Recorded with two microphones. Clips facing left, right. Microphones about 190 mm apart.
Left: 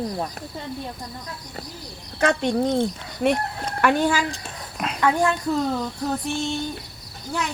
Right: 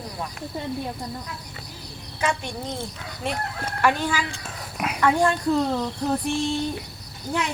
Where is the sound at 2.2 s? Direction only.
60° left (ahead or behind).